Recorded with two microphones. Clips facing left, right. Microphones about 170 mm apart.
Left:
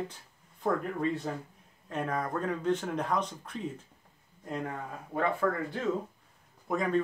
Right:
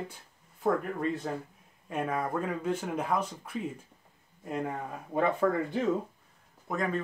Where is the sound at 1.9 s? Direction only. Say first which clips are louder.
Right 1 dB; 10° right (ahead or behind).